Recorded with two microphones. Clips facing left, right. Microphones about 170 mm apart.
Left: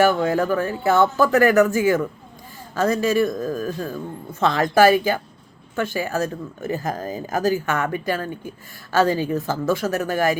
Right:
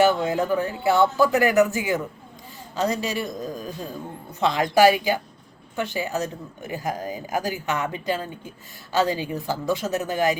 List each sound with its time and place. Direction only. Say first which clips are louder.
0.0 s speech: left 2 dB; 15° right (ahead or behind)